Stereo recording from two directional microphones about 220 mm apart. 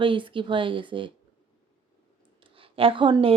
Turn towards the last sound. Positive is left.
turn(degrees=-25)  # may be behind; listen again after turning